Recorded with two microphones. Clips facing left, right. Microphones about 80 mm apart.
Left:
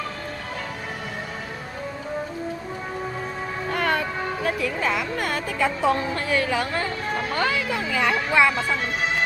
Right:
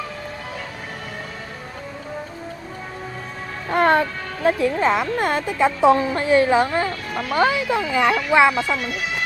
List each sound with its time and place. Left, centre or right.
3.7 s speech: right
7.1 s speech: left
7.3 s speech: right